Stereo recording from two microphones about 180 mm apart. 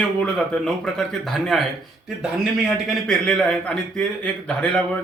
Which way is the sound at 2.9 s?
5° left (ahead or behind).